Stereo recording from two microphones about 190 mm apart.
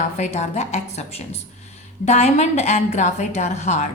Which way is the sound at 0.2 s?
35° left (ahead or behind).